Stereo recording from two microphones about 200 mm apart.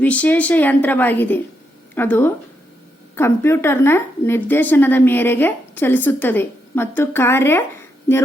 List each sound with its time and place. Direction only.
0.0 s a woman's voice: 5° left (ahead or behind)